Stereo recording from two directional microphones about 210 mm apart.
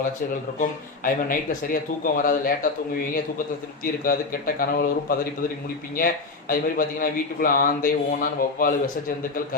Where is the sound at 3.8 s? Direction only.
45° left (ahead or behind).